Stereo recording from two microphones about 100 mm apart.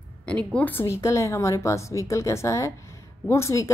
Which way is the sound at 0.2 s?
10° left (ahead or behind).